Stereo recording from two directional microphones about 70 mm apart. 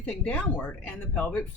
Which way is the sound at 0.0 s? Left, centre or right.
Centre.